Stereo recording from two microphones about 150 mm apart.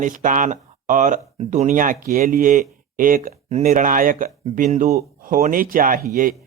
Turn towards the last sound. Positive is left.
turn(degrees=-65)  # may be behind; listen again after turning